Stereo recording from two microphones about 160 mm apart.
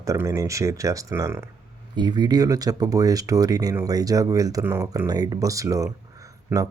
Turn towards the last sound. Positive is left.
turn(degrees=-20)  # may be behind; listen again after turning